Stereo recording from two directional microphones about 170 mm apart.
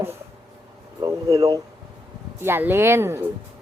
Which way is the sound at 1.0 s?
30° right (ahead or behind).